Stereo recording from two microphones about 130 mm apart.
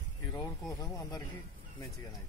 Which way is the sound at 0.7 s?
30° left (ahead or behind).